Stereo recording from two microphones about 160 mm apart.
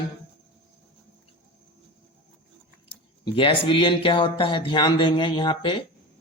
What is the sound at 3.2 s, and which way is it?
Speech, 35° left (ahead or behind).